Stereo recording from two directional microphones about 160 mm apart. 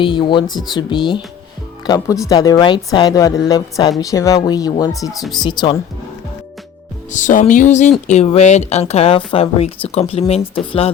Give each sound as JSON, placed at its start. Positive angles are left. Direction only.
{"t": 0.0, "sound": "a woman's voice", "side_deg": 30}
{"t": 7.1, "sound": "speech", "side_deg": 50}